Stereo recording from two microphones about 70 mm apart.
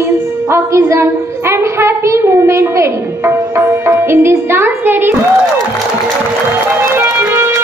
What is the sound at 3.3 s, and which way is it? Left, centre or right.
Speech, right.